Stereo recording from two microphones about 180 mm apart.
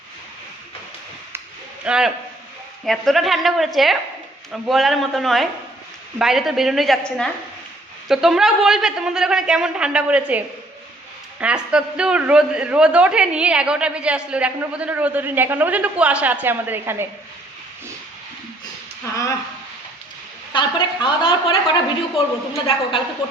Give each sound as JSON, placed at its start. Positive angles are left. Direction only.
{"t": 1.8, "sound": "a woman's voice", "side_deg": -5}
{"t": 19.1, "sound": "a woman's voice", "side_deg": 20}
{"t": 20.5, "sound": "a woman's voice", "side_deg": 25}